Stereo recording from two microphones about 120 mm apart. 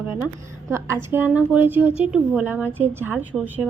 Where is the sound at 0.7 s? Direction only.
20° right (ahead or behind).